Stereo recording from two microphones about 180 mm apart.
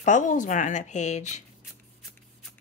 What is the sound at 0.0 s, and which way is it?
A woman's voice, 45° left (ahead or behind).